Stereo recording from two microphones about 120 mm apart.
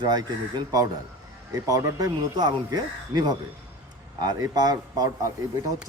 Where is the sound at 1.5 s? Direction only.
30° right (ahead or behind).